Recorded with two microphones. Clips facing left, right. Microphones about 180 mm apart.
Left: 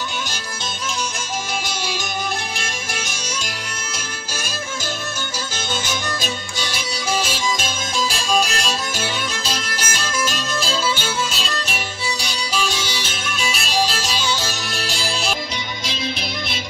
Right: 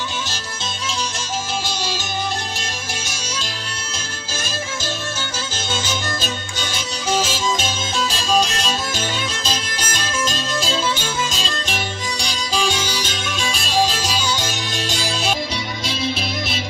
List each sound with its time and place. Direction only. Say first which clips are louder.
8.6 s music: right 1 dB; 10° left (ahead or behind)
13.5 s music: even; 5° left (ahead or behind)